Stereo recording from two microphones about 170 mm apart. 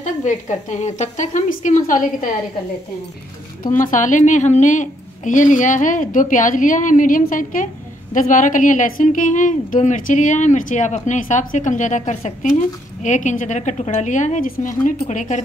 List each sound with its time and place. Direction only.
0.0 s a woman's voice: 45° left (ahead or behind)
3.7 s a woman's voice: 50° left (ahead or behind)